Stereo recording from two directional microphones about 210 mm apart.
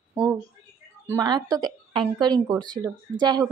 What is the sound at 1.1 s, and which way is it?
A woman's voice, 20° right (ahead or behind).